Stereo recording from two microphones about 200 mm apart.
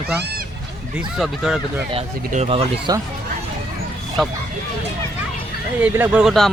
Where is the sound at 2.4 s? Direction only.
25° right (ahead or behind).